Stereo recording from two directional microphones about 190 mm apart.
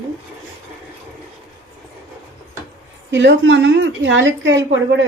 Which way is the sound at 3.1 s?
70° right (ahead or behind).